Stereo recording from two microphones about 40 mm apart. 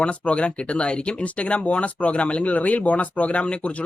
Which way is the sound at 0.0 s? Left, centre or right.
Left.